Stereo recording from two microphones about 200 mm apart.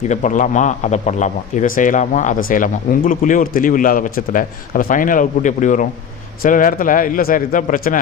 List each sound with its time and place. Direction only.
0.1 s a man's voice: 40° left (ahead or behind)